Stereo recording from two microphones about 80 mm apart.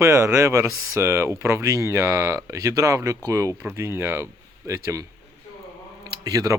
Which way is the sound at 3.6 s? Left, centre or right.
Right.